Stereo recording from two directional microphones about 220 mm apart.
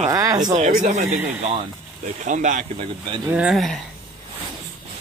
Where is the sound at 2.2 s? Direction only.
35° right (ahead or behind).